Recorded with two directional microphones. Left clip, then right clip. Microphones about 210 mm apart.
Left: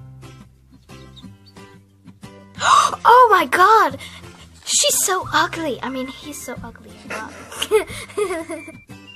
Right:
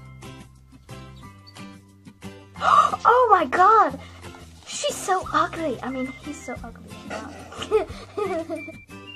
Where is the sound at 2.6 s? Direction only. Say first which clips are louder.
Left 3 dB; 15° left (ahead or behind).